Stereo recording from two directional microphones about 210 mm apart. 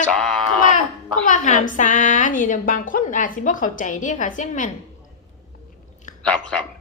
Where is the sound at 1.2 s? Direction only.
35° left (ahead or behind).